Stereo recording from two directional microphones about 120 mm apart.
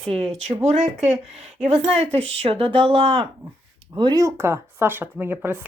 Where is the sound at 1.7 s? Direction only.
55° right (ahead or behind).